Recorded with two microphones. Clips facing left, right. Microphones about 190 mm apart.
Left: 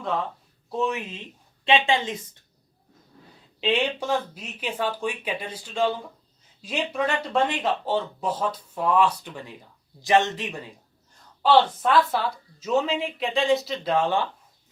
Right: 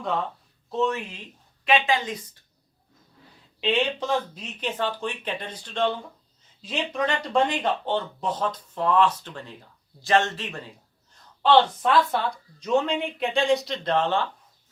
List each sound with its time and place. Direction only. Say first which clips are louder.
0.0 s speech: even; centre (ahead or behind)
0.7 s a woman's voice: right 1 dB; 15° left (ahead or behind)
3.6 s speech: even; 10° left (ahead or behind)